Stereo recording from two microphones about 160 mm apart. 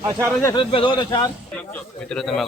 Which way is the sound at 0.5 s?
35° left (ahead or behind).